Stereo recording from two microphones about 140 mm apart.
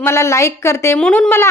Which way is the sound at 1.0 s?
10° left (ahead or behind).